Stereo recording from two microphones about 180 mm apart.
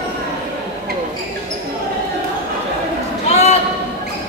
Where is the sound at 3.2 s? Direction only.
35° left (ahead or behind).